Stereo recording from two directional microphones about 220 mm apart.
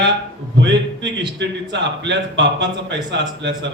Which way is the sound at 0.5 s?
55° right (ahead or behind).